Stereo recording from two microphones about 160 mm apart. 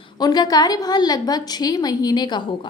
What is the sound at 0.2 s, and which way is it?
A woman's voice, 25° left (ahead or behind).